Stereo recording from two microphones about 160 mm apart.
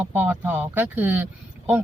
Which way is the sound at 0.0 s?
10° right (ahead or behind).